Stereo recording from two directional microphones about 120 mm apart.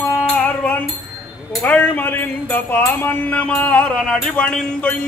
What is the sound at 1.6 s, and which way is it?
Music, 15° left (ahead or behind).